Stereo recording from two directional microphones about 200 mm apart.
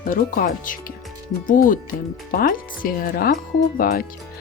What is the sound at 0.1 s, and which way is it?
Speech, 45° left (ahead or behind).